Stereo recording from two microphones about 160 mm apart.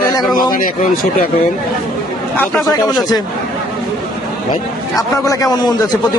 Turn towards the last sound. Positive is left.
turn(degrees=25)  # may be behind; listen again after turning